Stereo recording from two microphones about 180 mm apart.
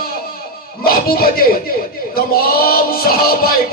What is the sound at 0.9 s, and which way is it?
A man's voice, 55° left (ahead or behind).